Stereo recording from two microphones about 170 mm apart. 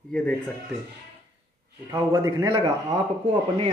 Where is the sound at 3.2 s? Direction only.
30° right (ahead or behind).